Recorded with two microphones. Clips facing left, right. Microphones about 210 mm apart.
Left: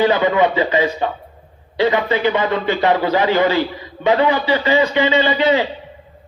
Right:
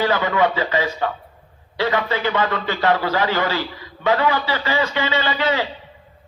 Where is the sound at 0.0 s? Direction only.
20° left (ahead or behind).